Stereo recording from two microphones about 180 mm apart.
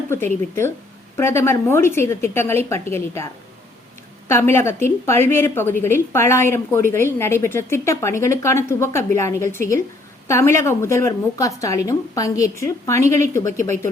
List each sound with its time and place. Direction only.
0.1 s speech: 15° left (ahead or behind)
4.3 s speech: 15° left (ahead or behind)